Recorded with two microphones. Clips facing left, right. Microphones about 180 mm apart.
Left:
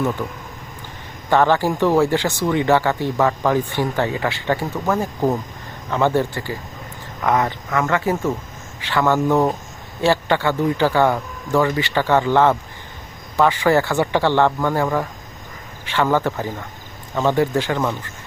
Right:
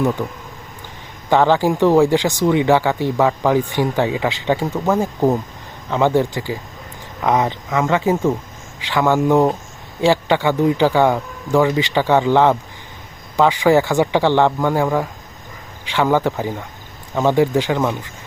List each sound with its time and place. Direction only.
0.2 s speech: 20° right (ahead or behind)